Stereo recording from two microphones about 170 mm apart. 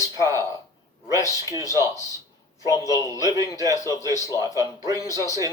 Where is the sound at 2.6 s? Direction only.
20° left (ahead or behind).